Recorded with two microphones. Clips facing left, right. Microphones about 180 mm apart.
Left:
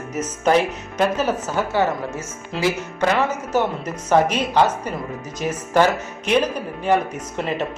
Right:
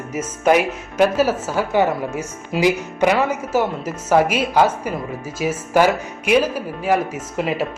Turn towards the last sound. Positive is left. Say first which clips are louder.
# right 2 dB
turn(degrees=-5)  # may be behind; listen again after turning